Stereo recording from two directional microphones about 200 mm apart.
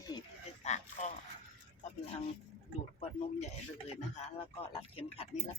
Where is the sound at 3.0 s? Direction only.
35° left (ahead or behind).